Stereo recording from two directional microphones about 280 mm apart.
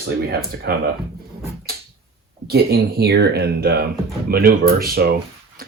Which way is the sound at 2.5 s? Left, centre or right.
Right.